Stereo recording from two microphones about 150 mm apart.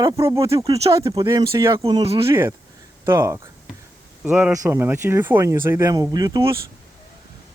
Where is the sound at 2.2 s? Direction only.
20° right (ahead or behind).